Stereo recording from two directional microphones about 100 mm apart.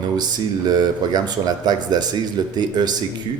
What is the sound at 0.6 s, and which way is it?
Speech, 45° right (ahead or behind).